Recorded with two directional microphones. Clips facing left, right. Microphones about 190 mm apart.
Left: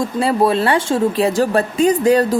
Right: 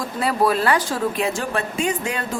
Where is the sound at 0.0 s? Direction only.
25° left (ahead or behind).